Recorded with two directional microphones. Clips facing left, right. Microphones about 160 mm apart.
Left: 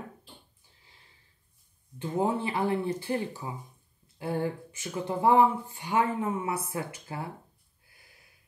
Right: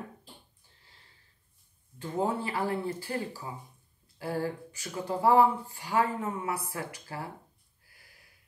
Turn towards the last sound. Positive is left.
turn(degrees=20)  # may be behind; listen again after turning